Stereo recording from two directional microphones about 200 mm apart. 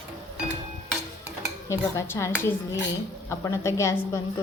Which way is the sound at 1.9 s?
15° left (ahead or behind).